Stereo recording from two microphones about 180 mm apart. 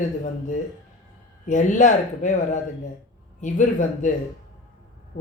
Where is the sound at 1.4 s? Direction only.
45° left (ahead or behind).